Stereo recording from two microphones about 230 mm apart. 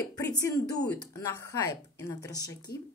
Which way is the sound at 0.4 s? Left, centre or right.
Centre.